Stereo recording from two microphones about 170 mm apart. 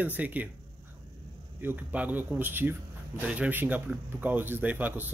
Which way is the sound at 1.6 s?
10° right (ahead or behind).